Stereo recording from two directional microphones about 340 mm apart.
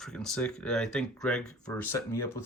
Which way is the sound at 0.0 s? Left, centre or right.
Centre.